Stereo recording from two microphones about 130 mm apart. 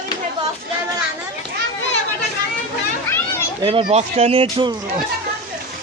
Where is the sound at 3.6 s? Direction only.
45° right (ahead or behind).